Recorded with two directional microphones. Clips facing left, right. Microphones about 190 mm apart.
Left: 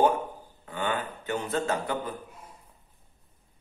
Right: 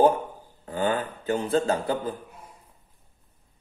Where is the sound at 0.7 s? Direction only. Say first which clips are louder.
Right 5 dB; 35° right (ahead or behind).